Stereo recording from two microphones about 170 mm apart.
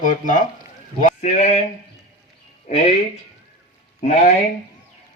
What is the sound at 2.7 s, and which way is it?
Speech, 45° left (ahead or behind).